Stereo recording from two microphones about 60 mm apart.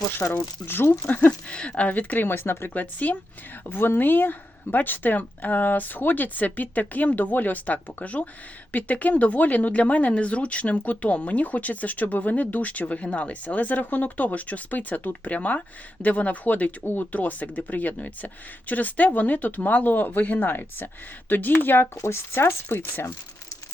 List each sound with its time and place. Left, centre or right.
0.2 s speech: centre
0.6 s speech: left
1.5 s speech: centre; by 21.8 s left
21.9 s speech: left